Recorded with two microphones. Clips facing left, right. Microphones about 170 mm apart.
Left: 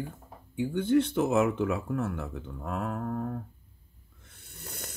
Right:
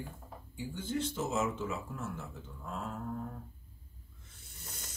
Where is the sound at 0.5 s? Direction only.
60° left (ahead or behind).